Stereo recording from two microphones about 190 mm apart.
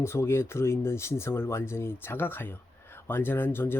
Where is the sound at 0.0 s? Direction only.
15° left (ahead or behind).